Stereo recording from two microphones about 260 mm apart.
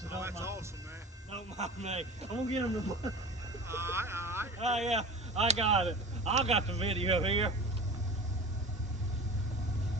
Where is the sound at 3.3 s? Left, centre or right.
Centre.